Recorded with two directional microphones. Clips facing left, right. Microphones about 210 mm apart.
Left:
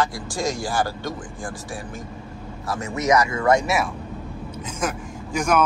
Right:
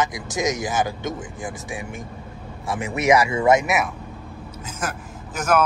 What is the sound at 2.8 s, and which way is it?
Speech, 25° right (ahead or behind).